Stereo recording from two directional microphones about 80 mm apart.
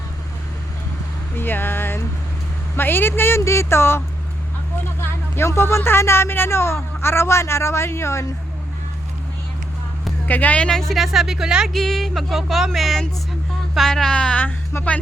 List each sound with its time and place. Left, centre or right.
1.4 s speech: left
10.2 s speech: left; by 11.7 s centre
11.7 s speech: centre
13.7 s music: centre
14.4 s speech: left